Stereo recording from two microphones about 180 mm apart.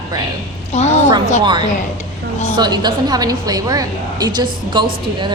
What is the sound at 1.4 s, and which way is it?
A woman's voice, 25° right (ahead or behind).